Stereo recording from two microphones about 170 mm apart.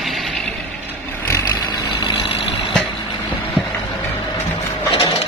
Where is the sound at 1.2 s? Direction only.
20° left (ahead or behind).